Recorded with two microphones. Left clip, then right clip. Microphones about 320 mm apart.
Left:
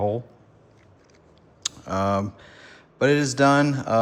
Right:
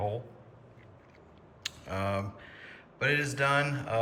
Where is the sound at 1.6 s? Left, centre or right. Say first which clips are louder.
Left 8 dB; centre.